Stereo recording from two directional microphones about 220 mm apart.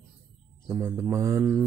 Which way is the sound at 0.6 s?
5° right (ahead or behind).